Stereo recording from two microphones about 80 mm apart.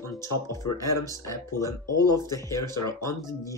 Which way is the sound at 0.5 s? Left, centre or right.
Left.